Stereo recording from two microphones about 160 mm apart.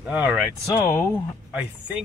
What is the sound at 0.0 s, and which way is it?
Speech, 10° right (ahead or behind).